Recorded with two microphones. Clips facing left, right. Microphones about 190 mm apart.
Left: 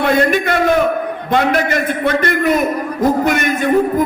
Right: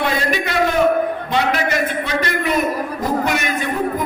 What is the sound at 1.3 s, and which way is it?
A man's voice, 50° left (ahead or behind).